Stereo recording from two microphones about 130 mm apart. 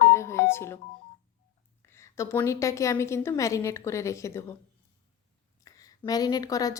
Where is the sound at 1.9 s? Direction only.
20° left (ahead or behind).